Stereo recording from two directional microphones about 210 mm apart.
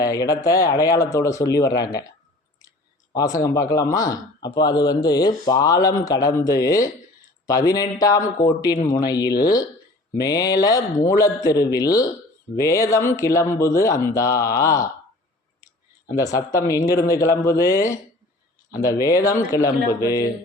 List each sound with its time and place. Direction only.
0.0 s speech: 15° left (ahead or behind)
3.1 s speech: 15° left (ahead or behind)